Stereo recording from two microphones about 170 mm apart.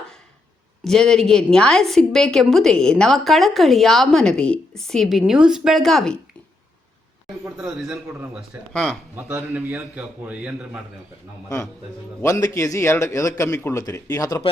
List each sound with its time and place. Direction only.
0.9 s a woman's voice: 5° left (ahead or behind)
7.5 s a woman's voice: 5° right (ahead or behind)
8.7 s a woman's voice: 5° left (ahead or behind)
9.1 s a man's voice: 10° right (ahead or behind)
11.4 s a man's voice: 20° left (ahead or behind)